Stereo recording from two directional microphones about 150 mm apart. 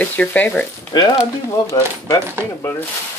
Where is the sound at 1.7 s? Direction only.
20° left (ahead or behind).